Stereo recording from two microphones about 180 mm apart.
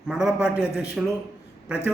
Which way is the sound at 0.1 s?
5° right (ahead or behind).